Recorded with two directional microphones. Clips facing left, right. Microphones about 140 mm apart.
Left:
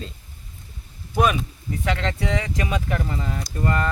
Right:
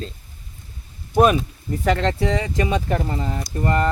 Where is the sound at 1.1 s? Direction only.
40° right (ahead or behind).